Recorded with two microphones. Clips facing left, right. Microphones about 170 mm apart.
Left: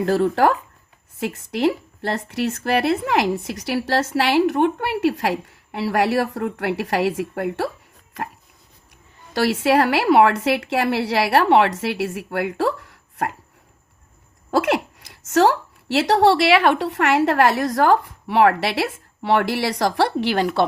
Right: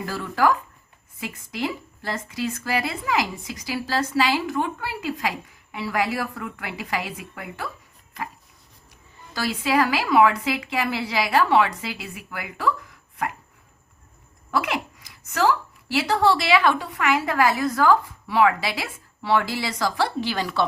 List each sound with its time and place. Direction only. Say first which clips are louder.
0.0 s speech: left 6 dB; 70° left (ahead or behind)
9.3 s speech: left 6 dB; 70° left (ahead or behind)
14.5 s speech: left 6 dB; 80° left; by 20.7 s 60° left (ahead or behind)